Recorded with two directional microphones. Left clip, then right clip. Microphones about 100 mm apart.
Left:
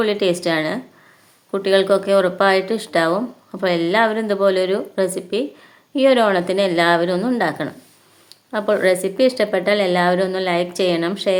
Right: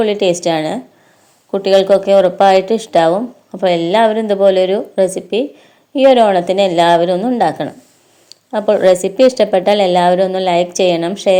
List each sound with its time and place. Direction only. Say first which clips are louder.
0.0 s a woman's voice: right 5 dB; 20° right (ahead or behind)